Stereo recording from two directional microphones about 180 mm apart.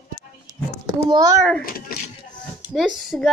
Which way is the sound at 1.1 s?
15° right (ahead or behind).